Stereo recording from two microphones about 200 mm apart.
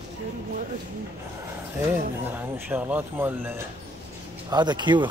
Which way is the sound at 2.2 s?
10° right (ahead or behind).